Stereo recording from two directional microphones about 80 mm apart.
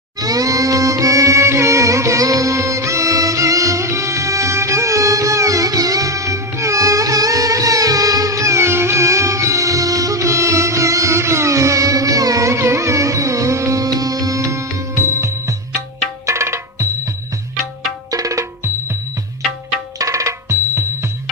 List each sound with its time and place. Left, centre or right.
0.2 s music: right
16.2 s tabla: right
18.1 s music: right
20.0 s music: right